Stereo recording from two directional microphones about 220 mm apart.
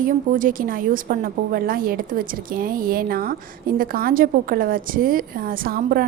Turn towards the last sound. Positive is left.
turn(degrees=-40)  # may be behind; listen again after turning